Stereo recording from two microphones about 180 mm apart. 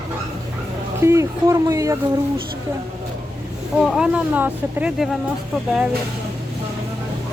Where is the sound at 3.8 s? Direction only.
5° right (ahead or behind).